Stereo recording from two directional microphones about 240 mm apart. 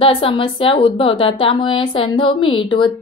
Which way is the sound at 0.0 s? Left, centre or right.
Left.